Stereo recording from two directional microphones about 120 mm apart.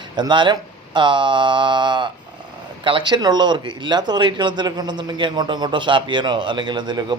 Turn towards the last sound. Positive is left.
turn(degrees=-40)  # may be behind; listen again after turning